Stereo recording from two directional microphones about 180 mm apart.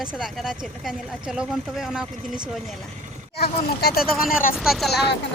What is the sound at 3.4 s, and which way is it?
Speech, 60° left (ahead or behind).